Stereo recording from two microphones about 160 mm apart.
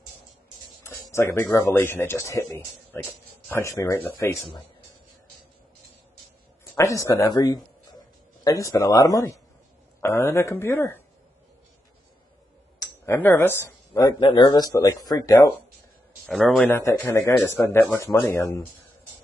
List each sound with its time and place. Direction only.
1.1 s a man's voice: 15° left (ahead or behind)
6.6 s a man's voice: 15° left (ahead or behind)
12.7 s speech: 20° left (ahead or behind)
16.3 s a man's voice: centre (ahead or behind)
16.7 s a man's voice: 15° left (ahead or behind)